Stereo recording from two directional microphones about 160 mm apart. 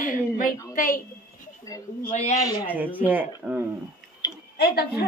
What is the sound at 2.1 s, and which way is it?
Speech, 45° left (ahead or behind).